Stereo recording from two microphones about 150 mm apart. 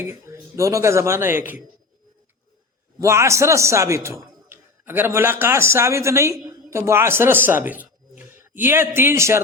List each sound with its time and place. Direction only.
0.1 s a man's voice: 20° right (ahead or behind)
3.0 s a man's voice: 20° right (ahead or behind)